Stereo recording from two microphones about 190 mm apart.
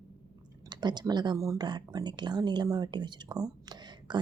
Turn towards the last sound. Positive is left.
turn(degrees=-25)  # may be behind; listen again after turning